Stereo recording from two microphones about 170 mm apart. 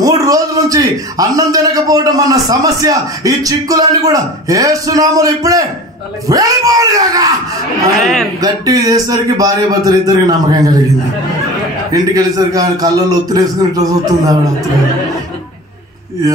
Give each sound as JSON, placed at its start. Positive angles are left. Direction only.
{"t": 0.0, "sound": "a man's voice", "side_deg": -20}
{"t": 8.4, "sound": "a man's voice", "side_deg": -20}
{"t": 11.9, "sound": "a man's voice", "side_deg": -20}